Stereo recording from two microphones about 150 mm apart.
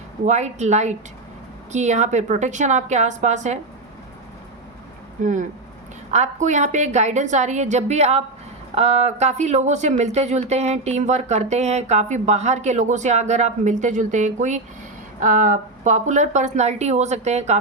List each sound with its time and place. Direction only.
0.3 s speech: 50° right (ahead or behind)
5.2 s speech: 55° right (ahead or behind)